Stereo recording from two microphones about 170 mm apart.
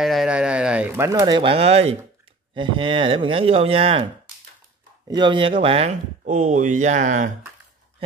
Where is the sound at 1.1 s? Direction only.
20° right (ahead or behind).